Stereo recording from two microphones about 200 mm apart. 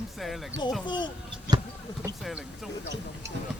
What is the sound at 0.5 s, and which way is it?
Speech, 60° right (ahead or behind).